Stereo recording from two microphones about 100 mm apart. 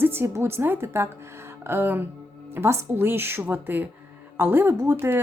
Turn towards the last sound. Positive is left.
turn(degrees=-25)  # may be behind; listen again after turning